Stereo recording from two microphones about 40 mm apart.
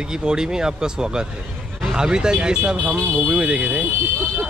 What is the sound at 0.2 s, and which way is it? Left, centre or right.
Speech, centre.